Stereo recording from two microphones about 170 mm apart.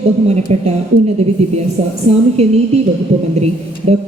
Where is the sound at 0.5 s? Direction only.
40° right (ahead or behind).